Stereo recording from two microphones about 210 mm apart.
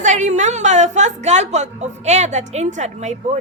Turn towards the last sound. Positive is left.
turn(degrees=-35)  # may be behind; listen again after turning